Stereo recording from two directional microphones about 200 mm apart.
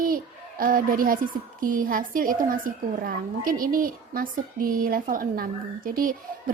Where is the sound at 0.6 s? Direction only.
45° right (ahead or behind).